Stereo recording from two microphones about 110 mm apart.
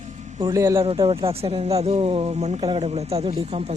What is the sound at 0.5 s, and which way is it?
Speech, 30° right (ahead or behind).